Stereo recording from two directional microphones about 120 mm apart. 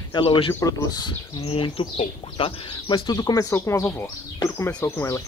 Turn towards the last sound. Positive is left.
turn(degrees=25)  # may be behind; listen again after turning